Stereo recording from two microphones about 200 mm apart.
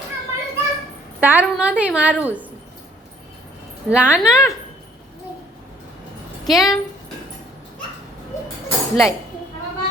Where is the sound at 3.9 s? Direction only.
5° right (ahead or behind).